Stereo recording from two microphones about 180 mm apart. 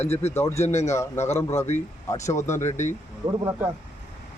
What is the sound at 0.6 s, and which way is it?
Speech, 40° left (ahead or behind).